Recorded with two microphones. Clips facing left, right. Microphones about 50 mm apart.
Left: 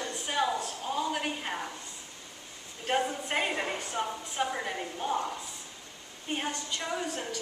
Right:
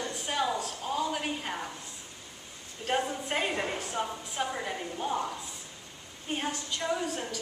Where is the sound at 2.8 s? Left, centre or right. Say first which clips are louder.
Left 1 dB; centre.